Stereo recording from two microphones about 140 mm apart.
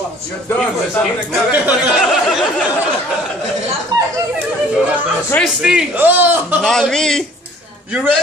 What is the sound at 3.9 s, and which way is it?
Speech, 30° right (ahead or behind).